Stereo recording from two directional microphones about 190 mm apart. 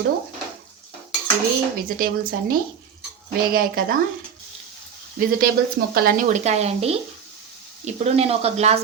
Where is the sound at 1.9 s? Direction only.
50° right (ahead or behind).